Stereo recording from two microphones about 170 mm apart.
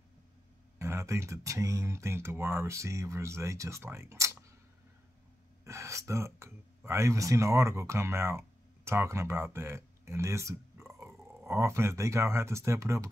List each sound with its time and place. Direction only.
0.7 s speech: 15° right (ahead or behind)
5.6 s speech: 15° right (ahead or behind)